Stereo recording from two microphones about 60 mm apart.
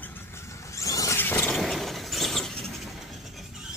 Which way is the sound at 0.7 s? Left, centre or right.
Left.